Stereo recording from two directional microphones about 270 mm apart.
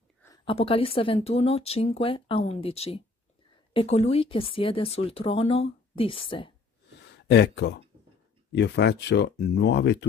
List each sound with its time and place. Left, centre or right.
0.2 s speech: centre
7.2 s speech: left